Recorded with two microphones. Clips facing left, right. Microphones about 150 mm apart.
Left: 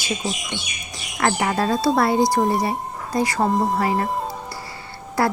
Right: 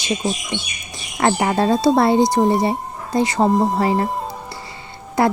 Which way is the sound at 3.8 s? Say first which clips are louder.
Right 3 dB; 30° right (ahead or behind).